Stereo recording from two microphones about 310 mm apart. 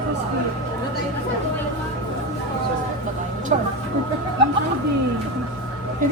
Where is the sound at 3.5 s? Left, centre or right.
Right.